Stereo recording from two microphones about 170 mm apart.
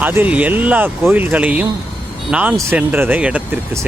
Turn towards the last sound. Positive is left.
turn(degrees=-10)  # may be behind; listen again after turning